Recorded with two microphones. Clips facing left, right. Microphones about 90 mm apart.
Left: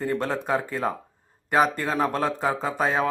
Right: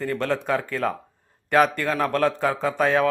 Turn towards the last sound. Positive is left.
turn(degrees=15)  # may be behind; listen again after turning